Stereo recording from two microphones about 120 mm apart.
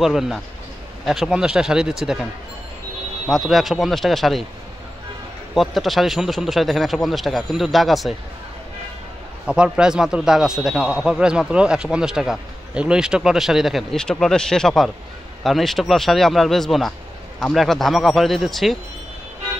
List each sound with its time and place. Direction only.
0.0 s speech: centre (ahead or behind)
3.3 s speech: centre (ahead or behind)
5.5 s speech: centre (ahead or behind)
9.5 s speech: 5° right (ahead or behind)